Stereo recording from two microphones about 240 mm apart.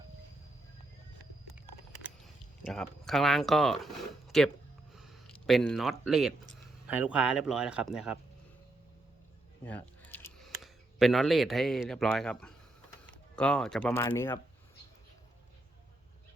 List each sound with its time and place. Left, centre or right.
2.2 s speech: centre
9.6 s speech: centre